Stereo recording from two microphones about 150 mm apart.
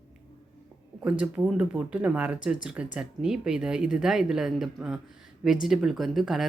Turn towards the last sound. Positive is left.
turn(degrees=0)  # may be behind; listen again after turning